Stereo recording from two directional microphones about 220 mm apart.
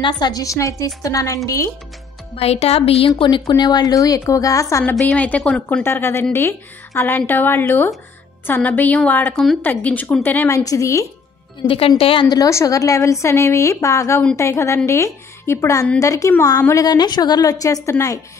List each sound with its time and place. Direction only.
0.0 s a woman's voice: 20° left (ahead or behind)
2.3 s a woman's voice: 30° left (ahead or behind)
11.6 s a woman's voice: 25° left (ahead or behind)